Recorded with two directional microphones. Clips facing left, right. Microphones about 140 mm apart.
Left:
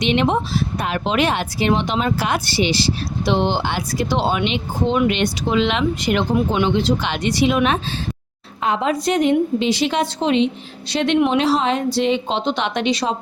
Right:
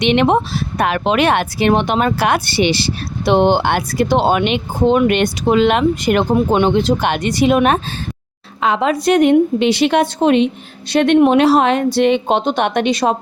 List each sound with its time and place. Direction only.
0.0 s speech: 65° right (ahead or behind)
8.6 s speech: 80° right; by 13.1 s 55° right (ahead or behind)